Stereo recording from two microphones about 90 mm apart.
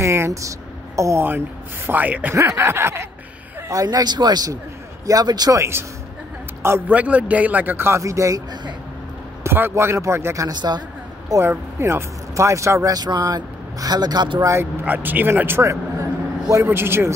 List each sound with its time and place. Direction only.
0.0 s a sound: 30° right (ahead or behind)
1.9 s a man's voice: 20° right (ahead or behind)
2.3 s a man's voice: 35° right (ahead or behind)
3.8 s speech: 50° right (ahead or behind)
5.6 s a man's voice: 30° right (ahead or behind)
6.9 s a man's voice: 15° right (ahead or behind); by 8.4 s 35° right (ahead or behind)
9.4 s a man's voice: 25° right (ahead or behind)
10.5 s speech: 50° right (ahead or behind)
11.4 s speech: 30° right (ahead or behind); by 14.4 s 55° right (ahead or behind)
14.4 s speech: 30° right (ahead or behind)